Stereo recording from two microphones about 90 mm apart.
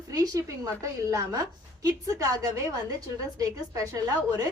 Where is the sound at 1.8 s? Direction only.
40° right (ahead or behind).